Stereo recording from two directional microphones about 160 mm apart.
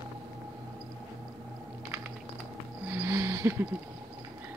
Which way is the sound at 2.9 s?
15° right (ahead or behind).